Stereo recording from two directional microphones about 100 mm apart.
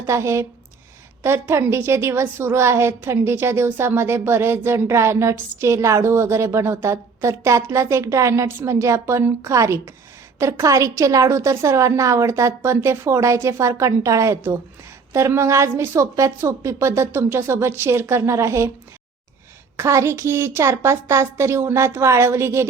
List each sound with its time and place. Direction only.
0.0 s a woman's voice: 30° right (ahead or behind)
19.7 s a woman's voice: 30° right (ahead or behind)